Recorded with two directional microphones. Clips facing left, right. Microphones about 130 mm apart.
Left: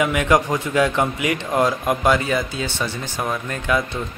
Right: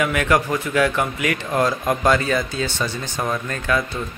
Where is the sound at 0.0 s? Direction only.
20° left (ahead or behind).